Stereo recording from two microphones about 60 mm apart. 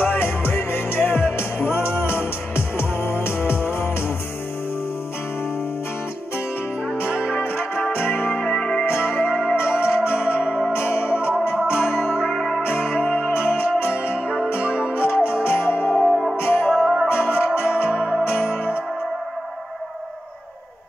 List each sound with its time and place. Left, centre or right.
0.0 s music: left
7.2 s music: left
8.5 s music: centre
8.8 s music: left
12.3 s music: centre
13.2 s music: left
16.7 s music: centre
17.1 s music: left